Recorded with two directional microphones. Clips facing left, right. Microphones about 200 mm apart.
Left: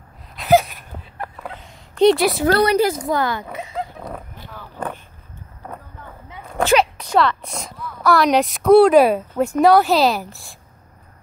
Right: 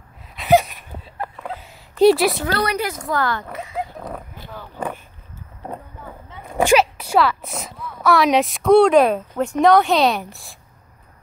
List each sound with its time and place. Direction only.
0.4 s a sound: centre (ahead or behind)
2.6 s speech: 30° left (ahead or behind)
3.0 s speech: 15° left (ahead or behind)
3.7 s dog: centre (ahead or behind)
4.7 s a sound: 10° right (ahead or behind)
6.5 s speech: 10° right (ahead or behind)